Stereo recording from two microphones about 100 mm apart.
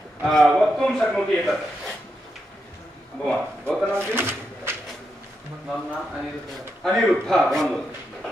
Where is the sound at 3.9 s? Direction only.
25° right (ahead or behind).